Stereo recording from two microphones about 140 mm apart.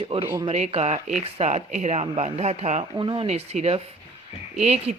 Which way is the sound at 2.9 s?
35° right (ahead or behind).